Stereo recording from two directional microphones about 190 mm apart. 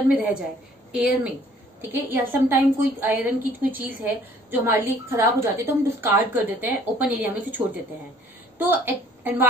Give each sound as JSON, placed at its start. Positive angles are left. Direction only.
{"t": 0.1, "sound": "a woman's voice", "side_deg": -5}